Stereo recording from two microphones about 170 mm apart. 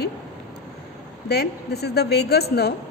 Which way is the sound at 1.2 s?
70° left (ahead or behind).